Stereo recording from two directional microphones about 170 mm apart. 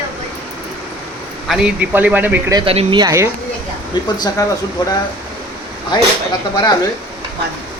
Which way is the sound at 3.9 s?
25° left (ahead or behind).